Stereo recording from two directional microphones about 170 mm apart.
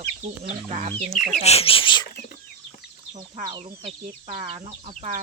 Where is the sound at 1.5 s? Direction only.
35° left (ahead or behind).